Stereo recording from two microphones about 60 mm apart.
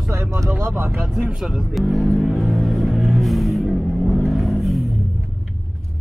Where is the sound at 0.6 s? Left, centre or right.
Right.